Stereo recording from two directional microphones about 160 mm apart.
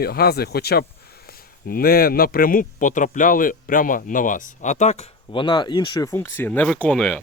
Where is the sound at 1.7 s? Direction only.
65° left (ahead or behind); by 5.0 s 45° left (ahead or behind).